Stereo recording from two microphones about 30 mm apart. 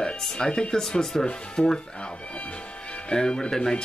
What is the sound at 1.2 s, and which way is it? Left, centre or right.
Speech, left.